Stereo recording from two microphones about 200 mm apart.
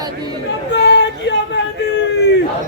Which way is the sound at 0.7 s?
60° left (ahead or behind).